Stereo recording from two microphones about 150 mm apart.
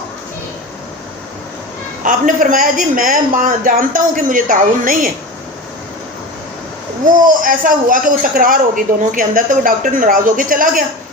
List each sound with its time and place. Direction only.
2.0 s a man's voice: 65° right (ahead or behind)
7.1 s a man's voice: 65° right (ahead or behind)